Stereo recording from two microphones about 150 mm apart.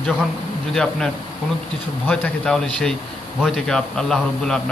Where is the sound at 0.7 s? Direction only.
5° left (ahead or behind).